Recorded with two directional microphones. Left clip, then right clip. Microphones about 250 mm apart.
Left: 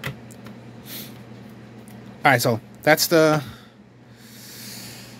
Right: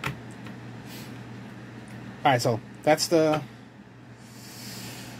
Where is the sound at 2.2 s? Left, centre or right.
Left.